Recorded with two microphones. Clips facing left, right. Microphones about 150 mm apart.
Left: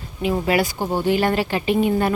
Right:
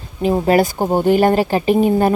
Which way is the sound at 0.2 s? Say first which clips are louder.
Right 6 dB; 40° right (ahead or behind).